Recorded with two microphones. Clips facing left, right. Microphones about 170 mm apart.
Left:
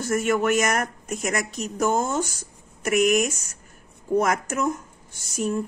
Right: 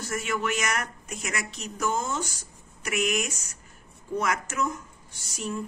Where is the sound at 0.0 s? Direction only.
50° left (ahead or behind).